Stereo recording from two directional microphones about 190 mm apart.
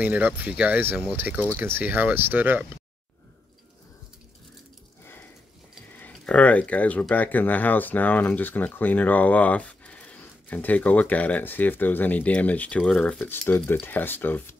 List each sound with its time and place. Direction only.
0.0 s speech: 10° right (ahead or behind)
5.9 s speech: 10° left (ahead or behind)